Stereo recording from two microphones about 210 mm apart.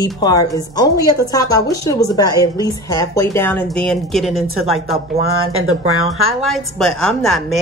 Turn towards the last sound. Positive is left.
turn(degrees=0)  # may be behind; listen again after turning